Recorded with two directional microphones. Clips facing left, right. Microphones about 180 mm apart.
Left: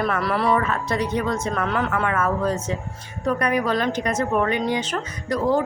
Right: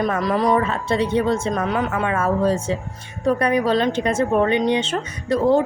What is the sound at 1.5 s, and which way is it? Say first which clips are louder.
A woman's voice: right 2 dB; 15° right (ahead or behind).